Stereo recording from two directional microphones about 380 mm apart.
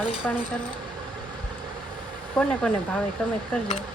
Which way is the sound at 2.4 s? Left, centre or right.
Centre.